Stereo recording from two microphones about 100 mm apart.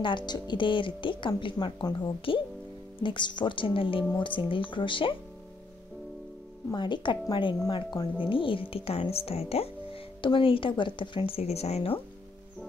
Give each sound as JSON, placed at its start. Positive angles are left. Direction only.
{"t": 0.0, "sound": "speech", "side_deg": 50}
{"t": 6.7, "sound": "a woman's voice", "side_deg": 50}
{"t": 8.3, "sound": "speech", "side_deg": 60}
{"t": 10.2, "sound": "speech", "side_deg": 60}